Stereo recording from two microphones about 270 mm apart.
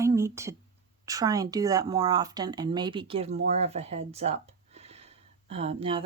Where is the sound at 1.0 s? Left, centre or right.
Centre.